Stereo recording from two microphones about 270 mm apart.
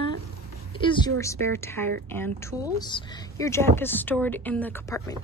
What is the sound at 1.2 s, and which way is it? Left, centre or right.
Speech, centre.